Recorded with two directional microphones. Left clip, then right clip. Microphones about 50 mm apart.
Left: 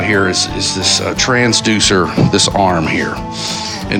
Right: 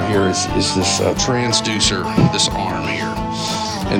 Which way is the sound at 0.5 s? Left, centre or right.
Right.